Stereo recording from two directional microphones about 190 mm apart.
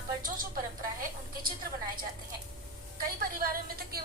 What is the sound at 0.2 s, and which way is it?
Speech, 45° right (ahead or behind).